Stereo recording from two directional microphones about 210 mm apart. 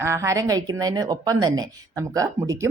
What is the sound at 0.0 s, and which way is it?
Speech, 15° right (ahead or behind).